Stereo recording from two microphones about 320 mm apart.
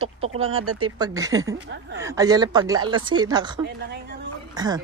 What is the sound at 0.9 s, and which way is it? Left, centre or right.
Speech, centre.